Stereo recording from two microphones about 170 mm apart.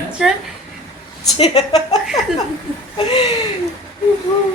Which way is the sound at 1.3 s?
35° left (ahead or behind).